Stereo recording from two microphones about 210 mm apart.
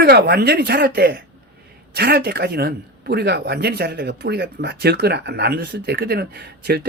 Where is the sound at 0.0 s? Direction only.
50° right (ahead or behind).